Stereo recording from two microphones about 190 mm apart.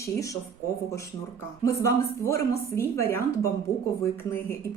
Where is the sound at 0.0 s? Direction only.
15° left (ahead or behind).